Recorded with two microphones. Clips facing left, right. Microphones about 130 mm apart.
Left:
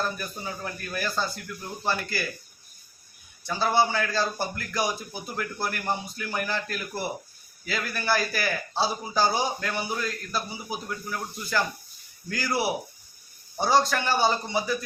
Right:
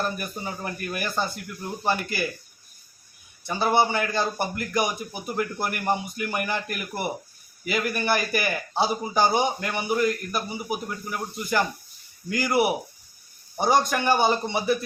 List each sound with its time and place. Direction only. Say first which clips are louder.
0.2 s a man's voice: right 2 dB; 15° right (ahead or behind)
3.4 s a man's voice: right 2 dB; 20° right (ahead or behind)